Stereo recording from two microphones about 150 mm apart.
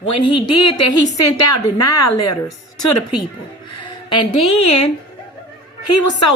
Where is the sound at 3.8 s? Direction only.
30° left (ahead or behind).